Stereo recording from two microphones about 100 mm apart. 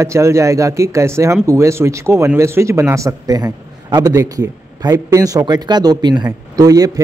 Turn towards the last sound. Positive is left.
turn(degrees=-35)  # may be behind; listen again after turning